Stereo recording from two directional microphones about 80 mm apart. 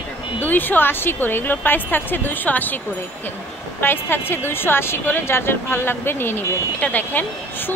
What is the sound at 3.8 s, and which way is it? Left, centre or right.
A woman's voice, left.